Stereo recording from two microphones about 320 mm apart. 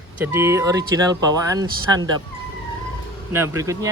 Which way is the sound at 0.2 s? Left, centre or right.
Centre.